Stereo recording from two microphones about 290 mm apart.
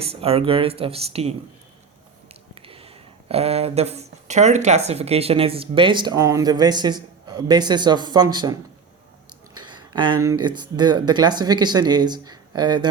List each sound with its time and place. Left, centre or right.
0.1 s speech: centre
2.6 s speech: centre
9.6 s a sound: centre
10.4 s speech: centre